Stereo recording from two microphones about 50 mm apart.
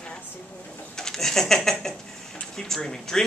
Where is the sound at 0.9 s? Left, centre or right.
Centre.